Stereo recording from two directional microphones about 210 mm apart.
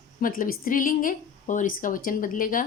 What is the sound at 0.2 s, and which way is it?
Speech, 40° left (ahead or behind).